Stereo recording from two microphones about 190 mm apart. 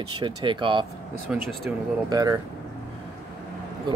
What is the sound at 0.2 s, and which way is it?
Speech, 25° right (ahead or behind).